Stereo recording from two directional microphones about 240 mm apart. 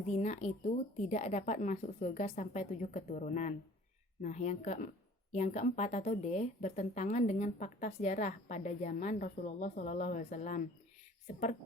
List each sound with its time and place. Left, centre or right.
0.1 s a woman's voice: left